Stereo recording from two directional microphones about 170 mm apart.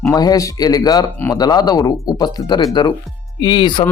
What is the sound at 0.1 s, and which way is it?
Speech, 20° left (ahead or behind).